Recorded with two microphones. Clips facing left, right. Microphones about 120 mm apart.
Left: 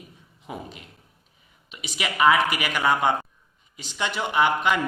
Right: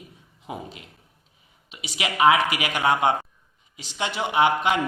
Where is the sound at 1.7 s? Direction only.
15° right (ahead or behind).